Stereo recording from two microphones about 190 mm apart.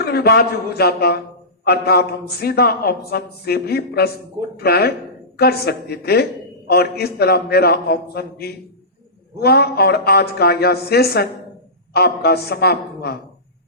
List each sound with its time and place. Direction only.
0.0 s a man's voice: 55° left (ahead or behind)